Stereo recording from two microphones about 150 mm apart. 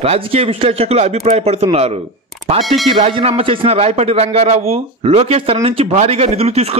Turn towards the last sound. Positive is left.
turn(degrees=-45)  # may be behind; listen again after turning